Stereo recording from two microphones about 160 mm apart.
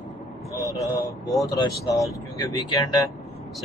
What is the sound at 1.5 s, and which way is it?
Speech, 20° left (ahead or behind).